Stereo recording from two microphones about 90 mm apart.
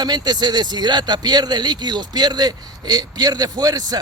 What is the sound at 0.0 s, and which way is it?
Speech, 50° right (ahead or behind).